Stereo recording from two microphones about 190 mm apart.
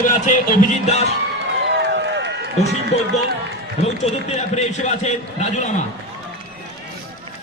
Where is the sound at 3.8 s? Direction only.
35° left (ahead or behind).